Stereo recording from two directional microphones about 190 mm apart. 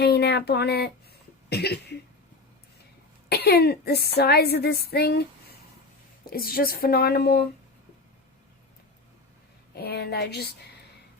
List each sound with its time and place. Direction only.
0.0 s child singing: 60° left (ahead or behind)
1.5 s speech: 60° left (ahead or behind)
3.2 s speech: 55° left (ahead or behind)
9.7 s speech: 60° left (ahead or behind)